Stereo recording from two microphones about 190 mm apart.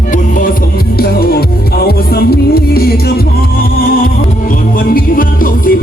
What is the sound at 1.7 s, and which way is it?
Music, 55° left (ahead or behind).